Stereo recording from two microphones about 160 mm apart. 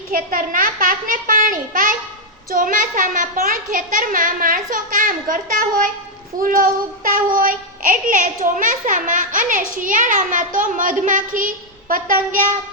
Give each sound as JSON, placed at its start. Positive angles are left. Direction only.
{"t": 0.1, "sound": "a child's voice", "side_deg": -60}